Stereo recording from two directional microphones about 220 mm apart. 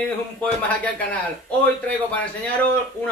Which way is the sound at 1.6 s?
5° left (ahead or behind).